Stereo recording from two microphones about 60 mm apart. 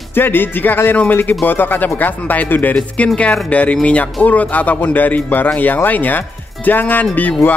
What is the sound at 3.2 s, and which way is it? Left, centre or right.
A man's voice, left.